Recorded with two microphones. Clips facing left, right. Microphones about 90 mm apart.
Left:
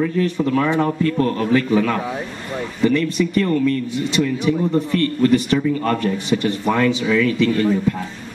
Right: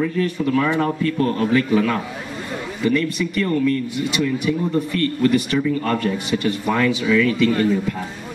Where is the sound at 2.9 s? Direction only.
25° left (ahead or behind).